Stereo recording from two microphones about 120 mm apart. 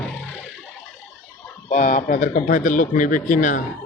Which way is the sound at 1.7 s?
90° left.